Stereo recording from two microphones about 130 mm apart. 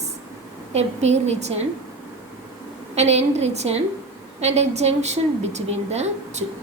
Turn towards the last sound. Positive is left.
turn(degrees=-60)  # may be behind; listen again after turning